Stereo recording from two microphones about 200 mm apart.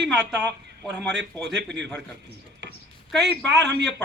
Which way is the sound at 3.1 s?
Centre (ahead or behind).